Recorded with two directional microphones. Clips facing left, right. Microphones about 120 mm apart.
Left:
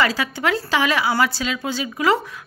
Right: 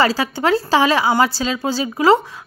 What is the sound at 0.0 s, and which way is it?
Speech, 30° right (ahead or behind).